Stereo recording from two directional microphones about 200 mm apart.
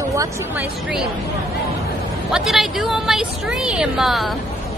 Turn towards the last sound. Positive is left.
turn(degrees=0)  # may be behind; listen again after turning